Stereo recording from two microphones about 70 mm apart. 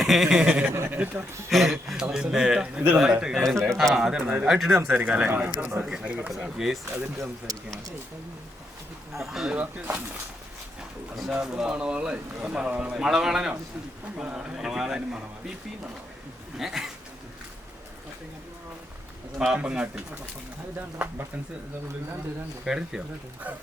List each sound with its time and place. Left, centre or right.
0.0 s speech: centre
0.9 s speech: right
1.5 s speech: centre
3.5 s a man's voice: right
3.9 s speech: centre
6.1 s speech: centre
6.3 s speech: centre
6.9 s speech: right
9.1 s speech: centre
9.5 s speech: right
11.1 s speech: centre
16.6 s speech: centre
19.4 s speech: centre
22.6 s speech: centre